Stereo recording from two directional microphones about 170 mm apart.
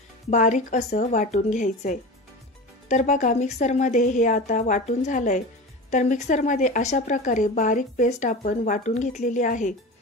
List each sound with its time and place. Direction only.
0.3 s speech: 45° left (ahead or behind)